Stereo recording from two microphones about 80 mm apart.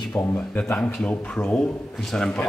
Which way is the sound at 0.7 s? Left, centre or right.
Centre.